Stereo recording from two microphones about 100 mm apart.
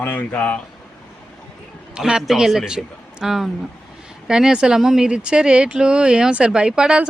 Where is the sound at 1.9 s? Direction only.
5° right (ahead or behind).